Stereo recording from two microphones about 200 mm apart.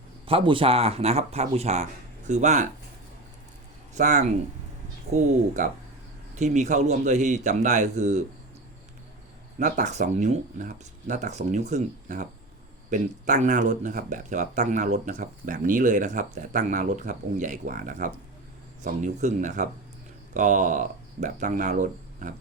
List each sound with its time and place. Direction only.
0.3 s speech: 25° right (ahead or behind)
3.9 s speech: 35° right (ahead or behind)
9.6 s speech: 35° right (ahead or behind)